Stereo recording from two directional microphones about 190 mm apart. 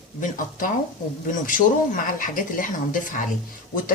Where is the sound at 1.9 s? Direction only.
45° left (ahead or behind).